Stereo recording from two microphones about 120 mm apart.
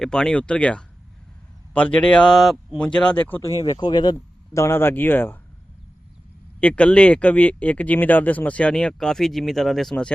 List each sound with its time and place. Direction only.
0.0 s speech: 5° left (ahead or behind)
3.6 s speech: 35° left (ahead or behind)
4.5 s speech: 20° left (ahead or behind)
6.6 s speech: 10° left (ahead or behind)